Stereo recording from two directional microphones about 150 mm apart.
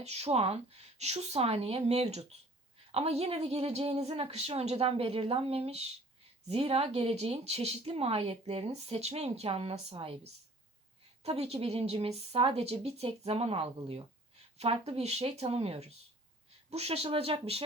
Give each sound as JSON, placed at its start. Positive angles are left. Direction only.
{"t": 0.0, "sound": "speech", "side_deg": -45}
{"t": 11.2, "sound": "speech", "side_deg": -45}